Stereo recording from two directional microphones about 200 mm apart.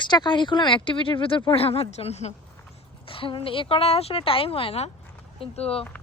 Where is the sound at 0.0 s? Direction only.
20° left (ahead or behind).